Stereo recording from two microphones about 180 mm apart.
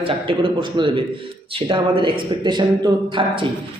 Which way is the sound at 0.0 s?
30° right (ahead or behind).